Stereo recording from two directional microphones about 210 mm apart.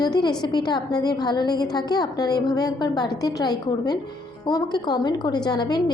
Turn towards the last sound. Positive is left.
turn(degrees=20)  # may be behind; listen again after turning